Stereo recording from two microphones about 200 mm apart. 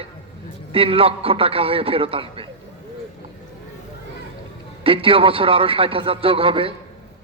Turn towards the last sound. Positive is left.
turn(degrees=-25)  # may be behind; listen again after turning